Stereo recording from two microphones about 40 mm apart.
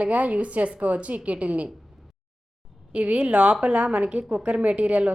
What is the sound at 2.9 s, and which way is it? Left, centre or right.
A woman's voice, right.